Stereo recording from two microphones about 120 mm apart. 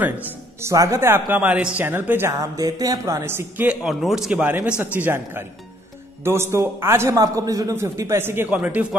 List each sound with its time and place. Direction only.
0.0 s speech: 20° right (ahead or behind)
3.8 s speech: 5° right (ahead or behind)